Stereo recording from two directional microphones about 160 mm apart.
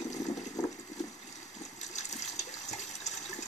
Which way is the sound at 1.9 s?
45° left (ahead or behind).